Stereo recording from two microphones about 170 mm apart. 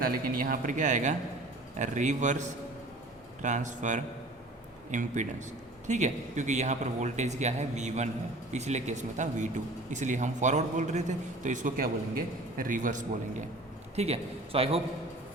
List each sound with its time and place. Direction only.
0.0 s speech: 60° right (ahead or behind)
13.9 s a man's voice: 40° right (ahead or behind)